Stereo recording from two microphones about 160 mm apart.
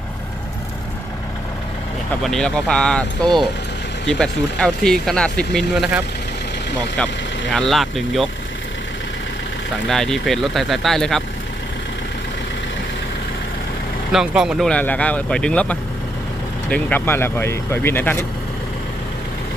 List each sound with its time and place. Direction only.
2.2 s speech: 5° left (ahead or behind)
7.5 s speech: centre (ahead or behind)
9.9 s speech: centre (ahead or behind)
14.1 s speech: 5° right (ahead or behind)
14.7 s speech: 10° left (ahead or behind)